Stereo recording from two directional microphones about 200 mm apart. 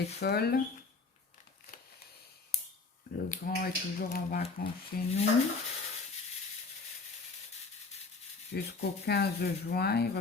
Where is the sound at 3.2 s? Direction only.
45° left (ahead or behind).